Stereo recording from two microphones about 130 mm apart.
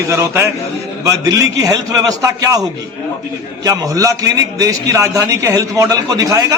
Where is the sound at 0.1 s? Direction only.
20° right (ahead or behind).